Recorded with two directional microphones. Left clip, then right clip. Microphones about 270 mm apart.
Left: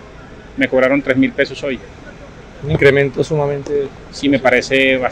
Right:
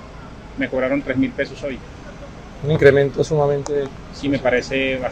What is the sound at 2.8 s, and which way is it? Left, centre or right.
Speech, left.